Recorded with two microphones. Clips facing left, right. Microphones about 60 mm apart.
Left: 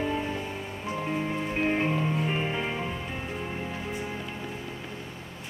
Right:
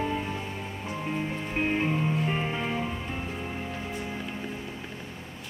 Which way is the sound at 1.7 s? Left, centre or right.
Centre.